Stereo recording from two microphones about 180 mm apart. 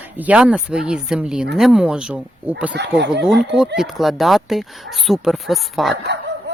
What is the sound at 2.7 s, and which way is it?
Speech, 75° right (ahead or behind).